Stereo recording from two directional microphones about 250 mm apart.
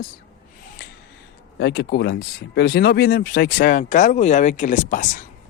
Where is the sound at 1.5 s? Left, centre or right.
Left.